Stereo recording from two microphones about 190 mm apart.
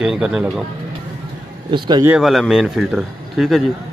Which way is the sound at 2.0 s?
Centre (ahead or behind).